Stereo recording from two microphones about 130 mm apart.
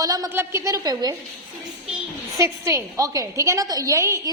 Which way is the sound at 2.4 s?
25° right (ahead or behind).